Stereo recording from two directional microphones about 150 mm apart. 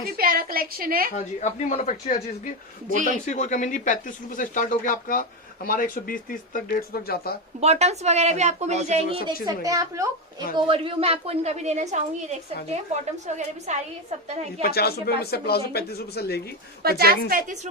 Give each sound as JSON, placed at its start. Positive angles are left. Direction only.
{"t": 0.2, "sound": "a woman's voice", "side_deg": -75}
{"t": 1.1, "sound": "speech", "side_deg": 50}
{"t": 3.2, "sound": "speech", "side_deg": 55}
{"t": 7.6, "sound": "speech", "side_deg": -45}
{"t": 9.2, "sound": "a woman's voice", "side_deg": -25}
{"t": 10.5, "sound": "speech", "side_deg": -35}
{"t": 13.2, "sound": "speech", "side_deg": -50}
{"t": 14.6, "sound": "speech", "side_deg": 90}
{"t": 16.8, "sound": "a woman's voice", "side_deg": -90}